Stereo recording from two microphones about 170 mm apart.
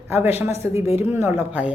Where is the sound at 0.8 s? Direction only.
35° left (ahead or behind).